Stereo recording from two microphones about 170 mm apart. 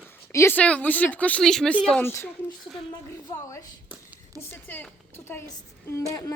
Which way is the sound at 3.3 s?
15° left (ahead or behind).